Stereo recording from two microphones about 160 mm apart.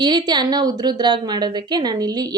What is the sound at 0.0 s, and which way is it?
A woman's voice, 25° right (ahead or behind).